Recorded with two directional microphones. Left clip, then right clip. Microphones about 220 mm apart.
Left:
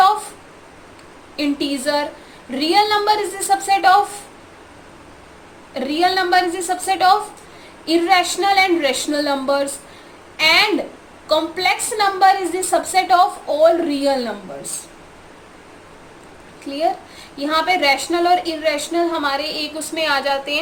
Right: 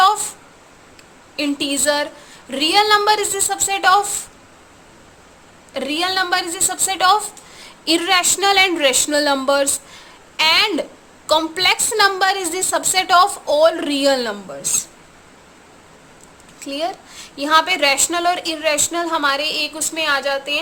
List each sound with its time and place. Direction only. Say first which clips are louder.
1.4 s a woman's voice: right 1 dB; 35° right (ahead or behind)
5.7 s a woman's voice: left 2 dB; 30° right (ahead or behind)
16.6 s a woman's voice: left 4 dB; 35° right (ahead or behind)